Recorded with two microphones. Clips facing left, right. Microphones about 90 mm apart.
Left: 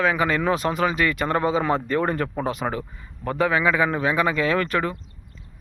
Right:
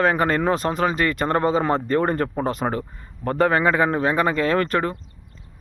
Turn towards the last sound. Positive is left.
turn(degrees=-35)  # may be behind; listen again after turning